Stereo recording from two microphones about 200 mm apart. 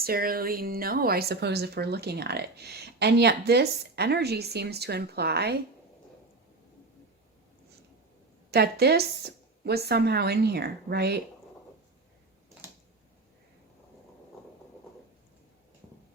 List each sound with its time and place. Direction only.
0.0 s speech: 50° right (ahead or behind)
8.4 s speech: 55° right (ahead or behind)